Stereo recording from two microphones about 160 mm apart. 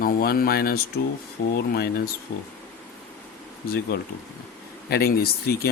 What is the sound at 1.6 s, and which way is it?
Speech, 85° left.